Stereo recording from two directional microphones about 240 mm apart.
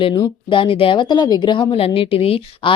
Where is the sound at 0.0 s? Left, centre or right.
Centre.